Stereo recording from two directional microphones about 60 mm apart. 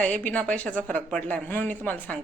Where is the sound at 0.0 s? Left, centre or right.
Left.